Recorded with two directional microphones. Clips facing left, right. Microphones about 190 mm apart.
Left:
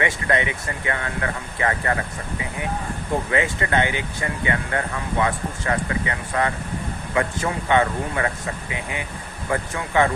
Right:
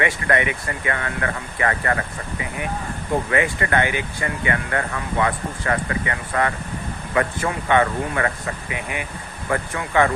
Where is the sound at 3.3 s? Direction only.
20° left (ahead or behind).